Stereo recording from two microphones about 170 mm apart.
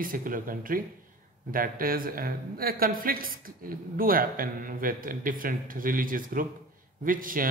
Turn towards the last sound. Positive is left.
turn(degrees=-55)  # may be behind; listen again after turning